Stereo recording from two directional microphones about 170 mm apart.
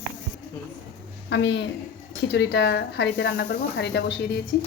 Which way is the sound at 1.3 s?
90° left.